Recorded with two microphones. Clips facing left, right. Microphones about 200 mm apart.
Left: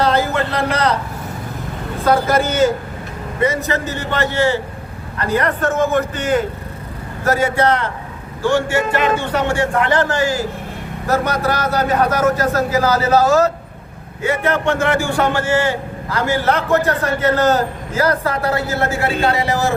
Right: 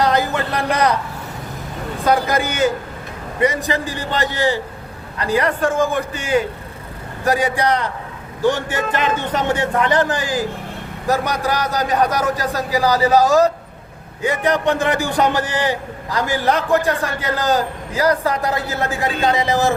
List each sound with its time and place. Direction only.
0.0 s speech: 15° right (ahead or behind)
2.0 s a man's voice: 15° right (ahead or behind)